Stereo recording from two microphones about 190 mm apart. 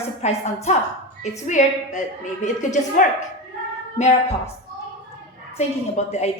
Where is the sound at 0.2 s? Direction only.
35° left (ahead or behind).